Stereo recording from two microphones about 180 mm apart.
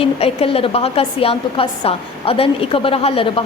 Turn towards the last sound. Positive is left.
turn(degrees=30)  # may be behind; listen again after turning